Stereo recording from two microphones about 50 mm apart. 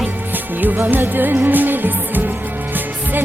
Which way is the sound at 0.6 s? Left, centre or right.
Right.